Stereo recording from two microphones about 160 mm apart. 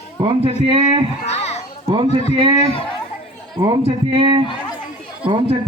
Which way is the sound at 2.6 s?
35° left (ahead or behind).